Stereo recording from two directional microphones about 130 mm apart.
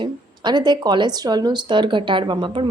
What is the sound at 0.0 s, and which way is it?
Speech, 35° right (ahead or behind).